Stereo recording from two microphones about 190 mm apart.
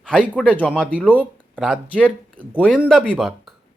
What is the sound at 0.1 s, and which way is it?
Speech, 5° left (ahead or behind).